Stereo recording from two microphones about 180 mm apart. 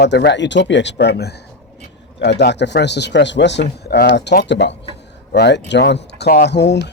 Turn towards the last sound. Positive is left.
turn(degrees=70)  # may be behind; listen again after turning